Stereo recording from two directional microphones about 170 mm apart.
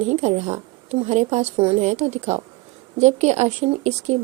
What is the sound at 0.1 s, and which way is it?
A woman's voice, 40° right (ahead or behind).